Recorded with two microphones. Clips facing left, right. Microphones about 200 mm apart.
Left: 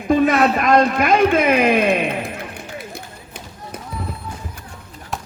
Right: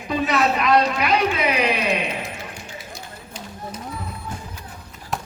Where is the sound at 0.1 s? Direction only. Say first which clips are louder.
Left 6 dB; 50° left (ahead or behind).